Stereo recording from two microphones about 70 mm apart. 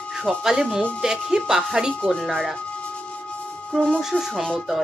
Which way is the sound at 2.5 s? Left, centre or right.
Centre.